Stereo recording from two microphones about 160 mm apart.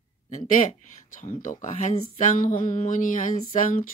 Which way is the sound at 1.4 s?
50° left (ahead or behind).